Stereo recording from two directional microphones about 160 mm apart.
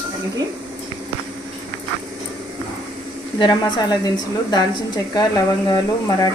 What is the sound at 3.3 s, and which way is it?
A woman's voice, 25° left (ahead or behind).